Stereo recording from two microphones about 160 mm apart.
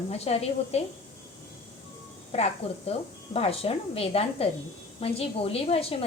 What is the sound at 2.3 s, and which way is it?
A woman's voice, 40° left (ahead or behind).